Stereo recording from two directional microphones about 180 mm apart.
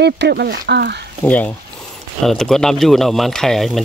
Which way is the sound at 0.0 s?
65° right (ahead or behind).